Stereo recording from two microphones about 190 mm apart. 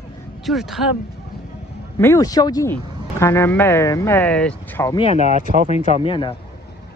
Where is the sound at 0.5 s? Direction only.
Centre (ahead or behind).